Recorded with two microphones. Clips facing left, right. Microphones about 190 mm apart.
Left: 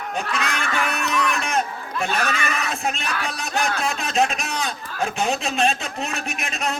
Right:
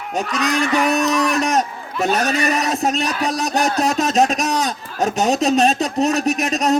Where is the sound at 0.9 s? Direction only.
40° right (ahead or behind).